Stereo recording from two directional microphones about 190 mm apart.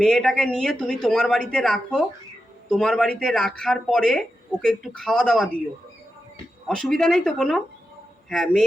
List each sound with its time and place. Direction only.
0.0 s speech: centre (ahead or behind)
6.7 s speech: centre (ahead or behind)